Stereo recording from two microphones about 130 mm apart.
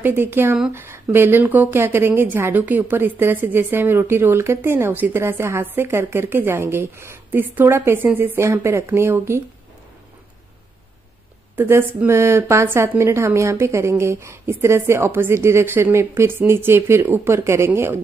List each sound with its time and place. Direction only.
0.0 s a woman's voice: 15° right (ahead or behind)
11.5 s a woman's voice: 15° right (ahead or behind)